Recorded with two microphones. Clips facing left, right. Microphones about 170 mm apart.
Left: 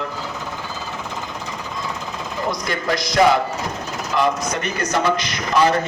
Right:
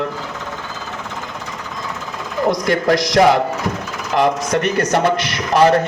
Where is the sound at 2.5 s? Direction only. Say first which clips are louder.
Right 8 dB; 75° right (ahead or behind).